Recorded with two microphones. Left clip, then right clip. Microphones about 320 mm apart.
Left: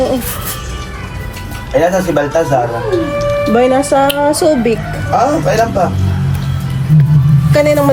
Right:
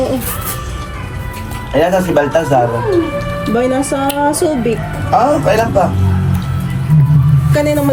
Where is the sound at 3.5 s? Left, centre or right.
Centre.